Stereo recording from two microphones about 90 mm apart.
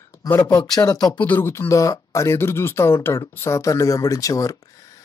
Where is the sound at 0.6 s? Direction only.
45° left (ahead or behind).